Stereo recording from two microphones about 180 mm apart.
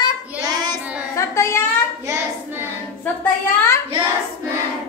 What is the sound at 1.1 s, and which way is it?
Speech, 15° left (ahead or behind).